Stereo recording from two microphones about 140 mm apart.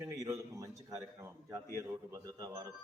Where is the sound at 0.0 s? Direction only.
20° right (ahead or behind).